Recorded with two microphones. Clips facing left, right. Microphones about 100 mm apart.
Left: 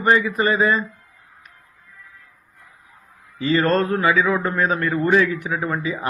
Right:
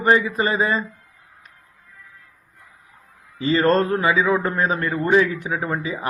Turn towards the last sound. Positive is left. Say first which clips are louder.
# left 1 dB
turn(degrees=-25)  # may be behind; listen again after turning